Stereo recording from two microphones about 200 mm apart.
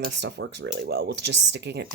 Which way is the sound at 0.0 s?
60° right (ahead or behind).